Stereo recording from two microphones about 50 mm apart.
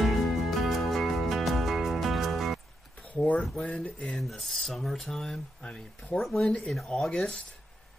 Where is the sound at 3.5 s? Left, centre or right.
Left.